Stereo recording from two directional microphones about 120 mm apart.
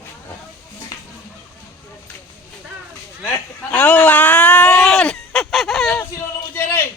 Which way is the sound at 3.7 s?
10° left (ahead or behind).